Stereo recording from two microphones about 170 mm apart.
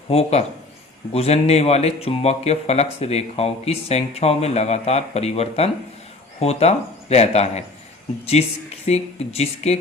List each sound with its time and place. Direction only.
0.1 s speech: 35° left (ahead or behind)